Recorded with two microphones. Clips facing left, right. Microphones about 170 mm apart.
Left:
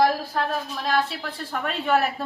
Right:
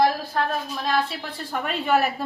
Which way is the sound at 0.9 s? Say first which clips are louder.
Left 1 dB; centre (ahead or behind).